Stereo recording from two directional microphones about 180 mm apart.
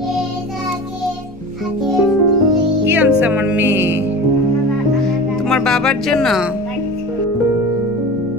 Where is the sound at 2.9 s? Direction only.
10° right (ahead or behind).